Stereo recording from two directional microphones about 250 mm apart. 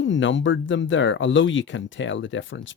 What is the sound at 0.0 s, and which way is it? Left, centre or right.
Speech, left.